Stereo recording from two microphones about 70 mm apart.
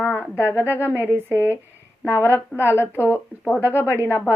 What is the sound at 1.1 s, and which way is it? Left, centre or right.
Speech, right.